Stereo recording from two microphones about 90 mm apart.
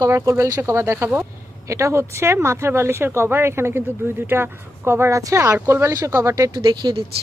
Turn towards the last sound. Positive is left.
turn(degrees=-60)  # may be behind; listen again after turning